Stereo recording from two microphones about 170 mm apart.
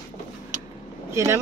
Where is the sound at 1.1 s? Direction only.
15° right (ahead or behind).